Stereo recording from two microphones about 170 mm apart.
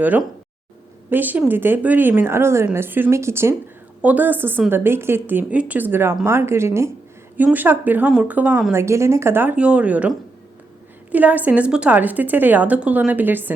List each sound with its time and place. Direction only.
0.0 s speech: 10° right (ahead or behind)